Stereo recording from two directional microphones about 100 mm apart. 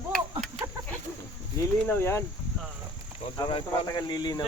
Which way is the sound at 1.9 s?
25° left (ahead or behind).